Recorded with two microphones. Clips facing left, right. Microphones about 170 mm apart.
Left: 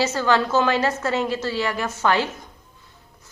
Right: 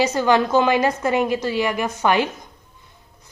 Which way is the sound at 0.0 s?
15° right (ahead or behind).